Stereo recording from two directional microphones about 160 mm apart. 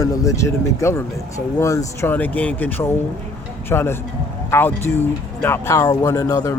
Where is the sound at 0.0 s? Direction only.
20° left (ahead or behind).